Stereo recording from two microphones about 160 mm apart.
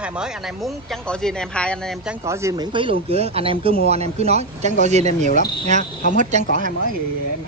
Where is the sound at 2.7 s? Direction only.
35° right (ahead or behind).